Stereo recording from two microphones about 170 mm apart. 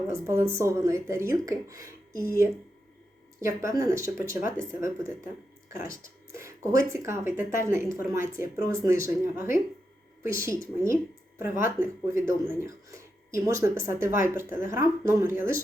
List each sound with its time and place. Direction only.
0.1 s speech: 15° right (ahead or behind)
3.4 s speech: 15° right (ahead or behind)
13.3 s speech: 15° right (ahead or behind)